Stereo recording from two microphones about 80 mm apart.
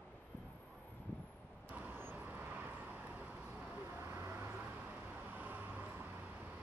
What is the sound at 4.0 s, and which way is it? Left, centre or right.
Vehicle, right.